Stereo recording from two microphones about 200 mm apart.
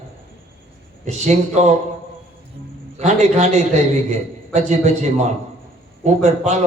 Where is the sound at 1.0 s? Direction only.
35° right (ahead or behind).